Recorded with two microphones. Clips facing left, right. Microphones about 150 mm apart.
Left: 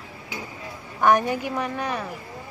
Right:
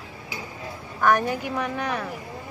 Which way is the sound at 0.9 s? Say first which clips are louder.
Left 2 dB; 15° left (ahead or behind).